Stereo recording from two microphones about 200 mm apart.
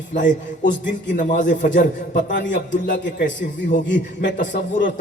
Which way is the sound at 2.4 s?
60° left (ahead or behind).